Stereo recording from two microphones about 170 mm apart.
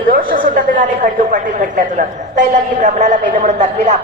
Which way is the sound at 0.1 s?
55° right (ahead or behind).